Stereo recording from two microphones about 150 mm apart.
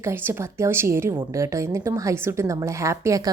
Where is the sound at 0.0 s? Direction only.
15° right (ahead or behind).